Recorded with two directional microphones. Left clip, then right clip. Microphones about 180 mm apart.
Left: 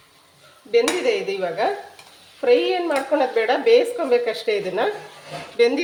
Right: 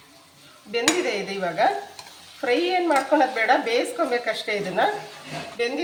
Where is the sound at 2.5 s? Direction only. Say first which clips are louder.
Left 3 dB; 25° left (ahead or behind).